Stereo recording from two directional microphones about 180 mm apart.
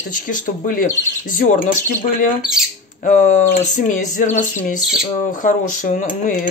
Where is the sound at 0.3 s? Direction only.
50° left (ahead or behind).